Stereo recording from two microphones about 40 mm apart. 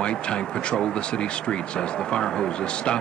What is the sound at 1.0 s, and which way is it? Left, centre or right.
Speech, left.